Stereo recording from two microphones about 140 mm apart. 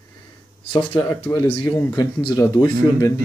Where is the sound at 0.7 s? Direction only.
40° left (ahead or behind).